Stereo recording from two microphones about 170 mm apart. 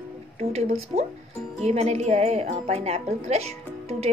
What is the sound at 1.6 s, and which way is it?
A woman's voice, 35° right (ahead or behind).